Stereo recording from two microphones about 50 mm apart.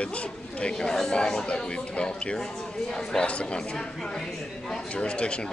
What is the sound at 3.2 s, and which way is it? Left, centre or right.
Speech, left.